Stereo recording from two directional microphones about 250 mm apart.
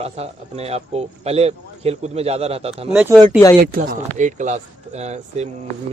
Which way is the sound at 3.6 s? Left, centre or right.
Right.